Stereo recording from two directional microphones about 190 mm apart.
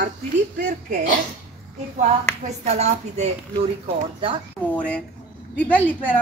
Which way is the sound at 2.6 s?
35° right (ahead or behind).